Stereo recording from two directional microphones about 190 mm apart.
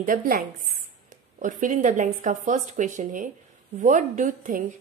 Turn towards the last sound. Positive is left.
turn(degrees=-45)  # may be behind; listen again after turning